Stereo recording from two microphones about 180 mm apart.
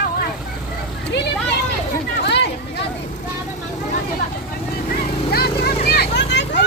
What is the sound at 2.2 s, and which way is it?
Chatter, 70° left (ahead or behind).